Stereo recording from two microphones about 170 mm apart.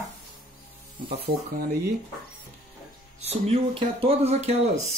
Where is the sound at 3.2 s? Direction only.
40° right (ahead or behind).